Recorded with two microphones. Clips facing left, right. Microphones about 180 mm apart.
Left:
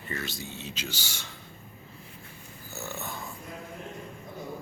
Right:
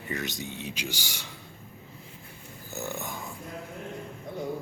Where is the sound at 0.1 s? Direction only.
15° right (ahead or behind).